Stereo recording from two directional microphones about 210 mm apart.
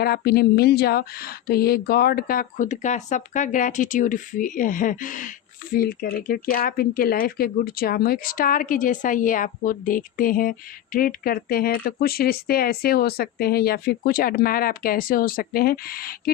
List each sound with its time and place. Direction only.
0.0 s speech: 50° left (ahead or behind)